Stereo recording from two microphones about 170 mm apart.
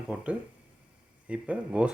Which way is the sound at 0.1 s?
5° right (ahead or behind).